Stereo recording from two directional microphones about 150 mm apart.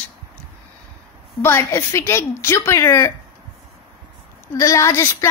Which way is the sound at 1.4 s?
15° left (ahead or behind).